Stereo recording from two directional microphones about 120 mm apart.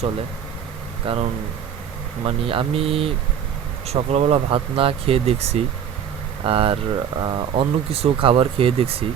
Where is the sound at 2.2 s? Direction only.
50° right (ahead or behind).